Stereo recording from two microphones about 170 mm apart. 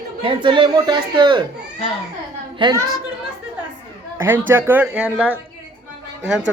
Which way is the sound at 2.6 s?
25° right (ahead or behind).